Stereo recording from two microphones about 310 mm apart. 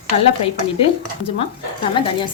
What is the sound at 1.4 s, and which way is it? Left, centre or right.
Speech, centre.